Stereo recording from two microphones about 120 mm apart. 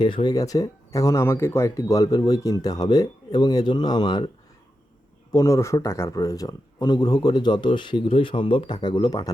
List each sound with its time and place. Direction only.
0.0 s speech: 40° left (ahead or behind)
5.3 s speech: 30° left (ahead or behind)